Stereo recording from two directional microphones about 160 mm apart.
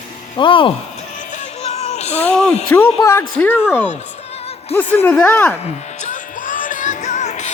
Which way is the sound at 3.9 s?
45° left (ahead or behind).